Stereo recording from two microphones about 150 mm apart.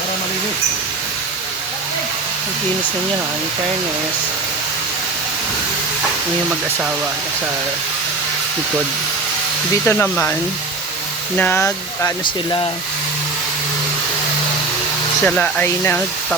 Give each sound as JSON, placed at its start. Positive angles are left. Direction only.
{"t": 9.8, "sound": "speech", "side_deg": 15}
{"t": 11.3, "sound": "speech", "side_deg": 15}
{"t": 15.2, "sound": "speech", "side_deg": 10}